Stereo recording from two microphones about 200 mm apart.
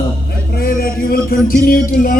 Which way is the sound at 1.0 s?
45° left (ahead or behind).